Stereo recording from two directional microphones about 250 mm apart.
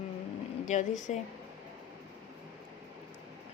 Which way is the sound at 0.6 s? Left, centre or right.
Left.